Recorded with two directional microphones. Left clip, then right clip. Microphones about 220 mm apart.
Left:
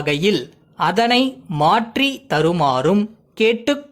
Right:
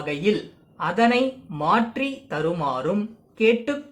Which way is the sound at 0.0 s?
45° left (ahead or behind).